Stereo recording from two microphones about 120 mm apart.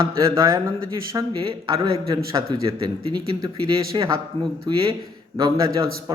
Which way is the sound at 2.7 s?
40° right (ahead or behind).